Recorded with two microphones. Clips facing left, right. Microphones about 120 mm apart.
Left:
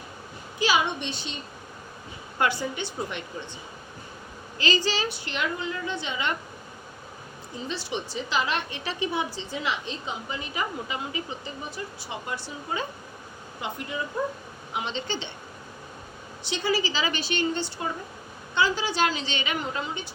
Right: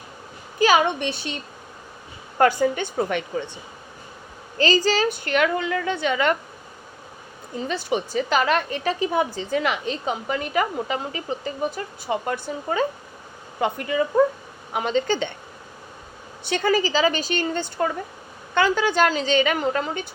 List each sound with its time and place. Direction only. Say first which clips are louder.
0.6 s a woman's voice: right 7 dB; 50° right (ahead or behind)
2.4 s a woman's voice: right 8 dB; 45° right (ahead or behind); by 3.4 s 65° right (ahead or behind)
4.5 s a woman's voice: right 7 dB; 40° right (ahead or behind)
7.7 s a woman's voice: right 8 dB; 50° right (ahead or behind)
10.9 s a woman's voice: right 5 dB; 40° right (ahead or behind)
13.6 s speech: right 10 dB; 75° right (ahead or behind)
14.7 s a woman's voice: right 9 dB; 45° right (ahead or behind)
16.4 s a woman's voice: right 6 dB; 55° right (ahead or behind)